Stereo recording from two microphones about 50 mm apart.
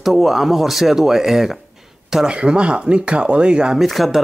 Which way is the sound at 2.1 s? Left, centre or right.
Centre.